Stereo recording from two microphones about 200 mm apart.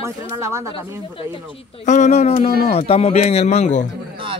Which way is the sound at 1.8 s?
35° left (ahead or behind).